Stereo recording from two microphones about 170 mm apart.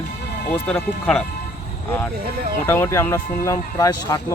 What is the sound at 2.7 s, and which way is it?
Speech, 15° left (ahead or behind).